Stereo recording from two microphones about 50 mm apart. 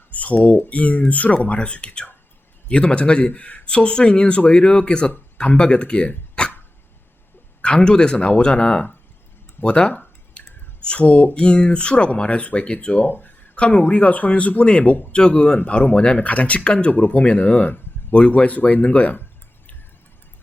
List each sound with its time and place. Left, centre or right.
0.1 s a man's voice: left
7.6 s a man's voice: left
10.4 s a sound: left
10.8 s a man's voice: left
13.0 s speech: left
13.6 s a man's voice: left
18.1 s a man's voice: left